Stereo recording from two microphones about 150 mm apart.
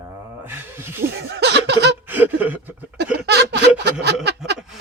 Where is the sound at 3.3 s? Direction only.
90° right.